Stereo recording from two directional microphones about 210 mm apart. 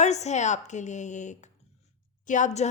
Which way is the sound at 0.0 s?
35° left (ahead or behind).